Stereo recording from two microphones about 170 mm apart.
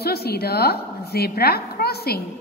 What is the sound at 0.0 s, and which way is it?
A woman's voice, 65° left (ahead or behind).